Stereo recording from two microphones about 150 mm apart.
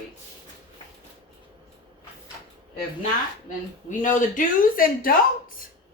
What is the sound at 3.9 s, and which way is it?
Speech, 60° left (ahead or behind).